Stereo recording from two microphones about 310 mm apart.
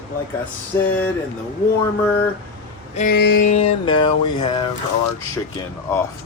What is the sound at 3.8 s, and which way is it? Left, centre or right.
Speech, centre.